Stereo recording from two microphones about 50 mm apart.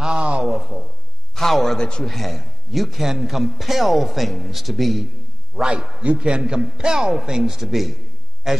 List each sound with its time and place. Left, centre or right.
0.0 s a sound: right
0.6 s speech: centre
1.3 s a man's voice: centre
5.6 s a man's voice: centre